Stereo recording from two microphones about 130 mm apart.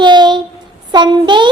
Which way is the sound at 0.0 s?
35° right (ahead or behind).